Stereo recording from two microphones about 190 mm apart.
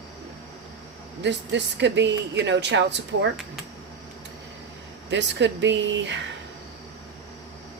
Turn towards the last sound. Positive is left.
turn(degrees=-70)  # may be behind; listen again after turning